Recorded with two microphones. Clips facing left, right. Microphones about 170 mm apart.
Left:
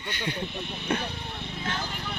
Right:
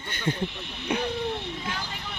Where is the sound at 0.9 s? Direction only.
15° right (ahead or behind).